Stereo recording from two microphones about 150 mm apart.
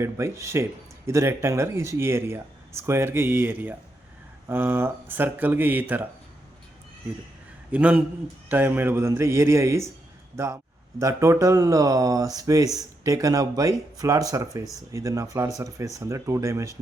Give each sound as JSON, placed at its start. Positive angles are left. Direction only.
{"t": 0.0, "sound": "speech", "side_deg": -20}
{"t": 7.7, "sound": "speech", "side_deg": -10}